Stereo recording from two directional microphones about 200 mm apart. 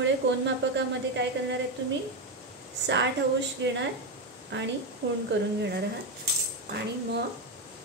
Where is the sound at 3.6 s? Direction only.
65° right (ahead or behind).